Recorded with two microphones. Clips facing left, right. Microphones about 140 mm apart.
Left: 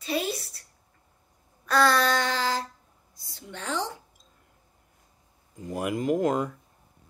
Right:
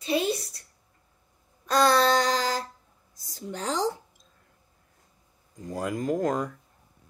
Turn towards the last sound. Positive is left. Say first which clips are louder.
# left 2 dB
turn(degrees=20)  # may be behind; listen again after turning